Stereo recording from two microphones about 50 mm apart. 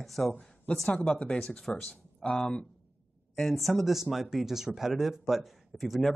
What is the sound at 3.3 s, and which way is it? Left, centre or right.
Speech, centre.